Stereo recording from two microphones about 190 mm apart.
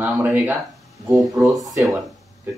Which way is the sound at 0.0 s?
10° right (ahead or behind).